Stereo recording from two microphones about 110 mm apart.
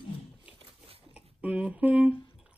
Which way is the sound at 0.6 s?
60° right (ahead or behind).